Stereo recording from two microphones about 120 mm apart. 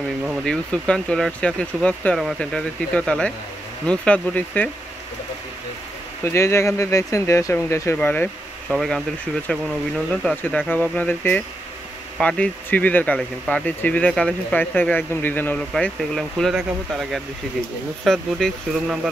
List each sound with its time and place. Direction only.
0.4 s speech: 10° left (ahead or behind)
6.2 s speech: 25° left (ahead or behind)
8.6 s speech: centre (ahead or behind)
15.7 s speech: centre (ahead or behind)